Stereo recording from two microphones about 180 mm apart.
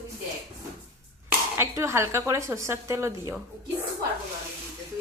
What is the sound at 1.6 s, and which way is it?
A woman's voice, 15° right (ahead or behind).